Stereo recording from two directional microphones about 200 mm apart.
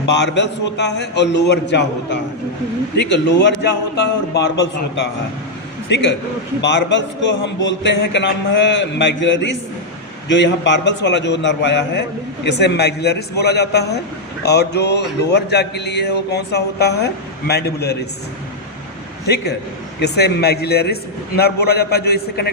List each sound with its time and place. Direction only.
0.0 s a man's voice: 60° left (ahead or behind)
5.9 s a man's voice: 60° left (ahead or behind)
20.0 s a man's voice: 55° left (ahead or behind)